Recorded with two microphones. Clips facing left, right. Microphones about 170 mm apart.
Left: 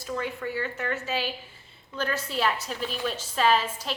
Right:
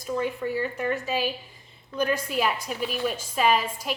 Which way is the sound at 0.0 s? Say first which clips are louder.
Right 4 dB; 15° right (ahead or behind).